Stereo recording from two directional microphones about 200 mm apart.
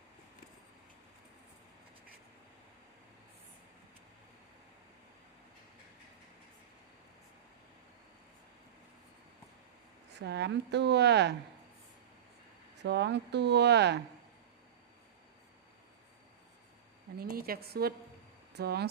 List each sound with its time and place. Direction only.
10.2 s speech: 60° right (ahead or behind)
12.8 s speech: 60° right (ahead or behind)
17.2 s a woman's voice: 50° right (ahead or behind)